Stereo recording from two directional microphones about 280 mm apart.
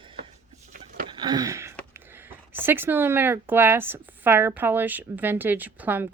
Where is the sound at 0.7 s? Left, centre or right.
Right.